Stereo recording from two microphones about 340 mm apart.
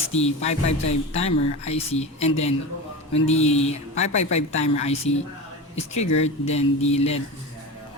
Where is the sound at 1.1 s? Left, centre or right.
Centre.